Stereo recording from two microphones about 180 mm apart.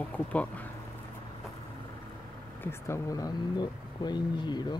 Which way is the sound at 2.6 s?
15° left (ahead or behind).